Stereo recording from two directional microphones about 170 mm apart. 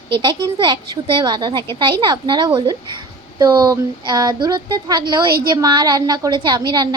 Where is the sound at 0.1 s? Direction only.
25° right (ahead or behind).